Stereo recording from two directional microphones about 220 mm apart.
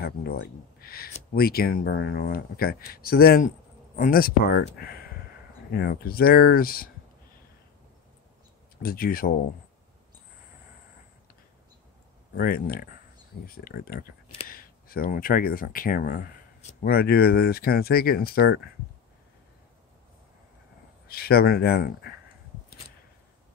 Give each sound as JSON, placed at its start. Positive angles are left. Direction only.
{"t": 0.0, "sound": "speech", "side_deg": 45}
{"t": 8.8, "sound": "speech", "side_deg": 40}
{"t": 12.4, "sound": "speech", "side_deg": 45}
{"t": 21.1, "sound": "speech", "side_deg": 45}